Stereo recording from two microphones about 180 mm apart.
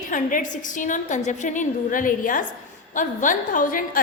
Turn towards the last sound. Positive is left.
turn(degrees=50)  # may be behind; listen again after turning